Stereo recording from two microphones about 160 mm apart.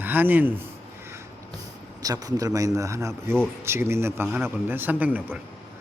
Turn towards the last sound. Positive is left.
turn(degrees=-10)  # may be behind; listen again after turning